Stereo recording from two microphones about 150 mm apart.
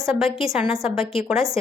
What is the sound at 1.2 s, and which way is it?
Speech, 5° right (ahead or behind).